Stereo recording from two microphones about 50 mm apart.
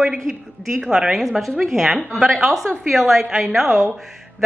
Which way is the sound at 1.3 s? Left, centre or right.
Centre.